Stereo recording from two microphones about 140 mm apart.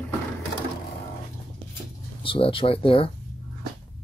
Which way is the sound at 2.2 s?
40° left (ahead or behind).